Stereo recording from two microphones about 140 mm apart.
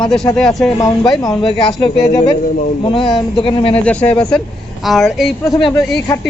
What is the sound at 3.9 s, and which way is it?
Speech, 10° left (ahead or behind).